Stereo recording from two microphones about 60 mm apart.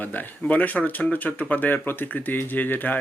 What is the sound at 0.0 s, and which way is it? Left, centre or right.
Speech, left.